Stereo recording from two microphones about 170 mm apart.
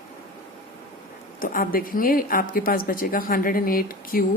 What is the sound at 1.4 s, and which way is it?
A woman's voice, 55° left (ahead or behind).